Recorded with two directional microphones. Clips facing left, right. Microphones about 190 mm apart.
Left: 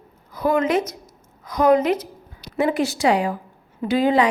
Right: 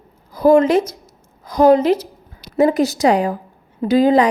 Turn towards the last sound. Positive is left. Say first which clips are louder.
# right 5 dB
turn(degrees=-40)  # may be behind; listen again after turning